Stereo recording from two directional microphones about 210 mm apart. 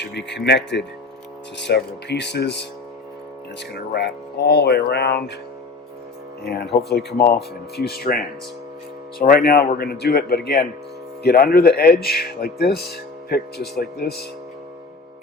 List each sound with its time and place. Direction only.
0.0 s speech: 55° left (ahead or behind)
6.4 s speech: 50° left (ahead or behind)